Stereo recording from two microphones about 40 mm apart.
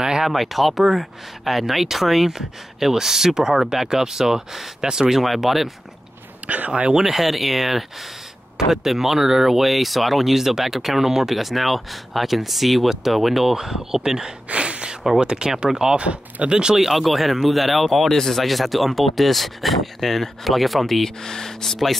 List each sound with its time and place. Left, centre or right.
0.0 s a sound: centre
0.3 s speech: centre
5.4 s speech: centre
6.4 s speech: right
7.1 s speech: centre
14.5 s gasp: right
15.1 s speech: centre
16.0 s speech: right
16.8 s speech: centre